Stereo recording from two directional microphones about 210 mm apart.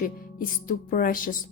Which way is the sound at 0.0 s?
40° left (ahead or behind).